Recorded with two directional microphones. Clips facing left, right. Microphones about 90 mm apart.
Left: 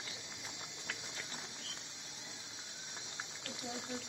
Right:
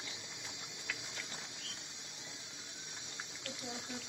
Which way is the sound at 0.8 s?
35° left (ahead or behind).